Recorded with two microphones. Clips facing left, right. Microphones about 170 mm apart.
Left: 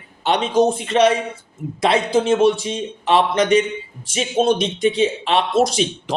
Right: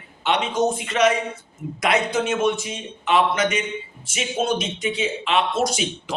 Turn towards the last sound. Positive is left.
turn(degrees=35)  # may be behind; listen again after turning